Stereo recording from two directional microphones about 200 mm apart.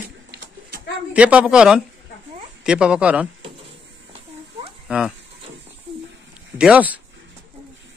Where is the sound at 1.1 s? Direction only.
5° right (ahead or behind).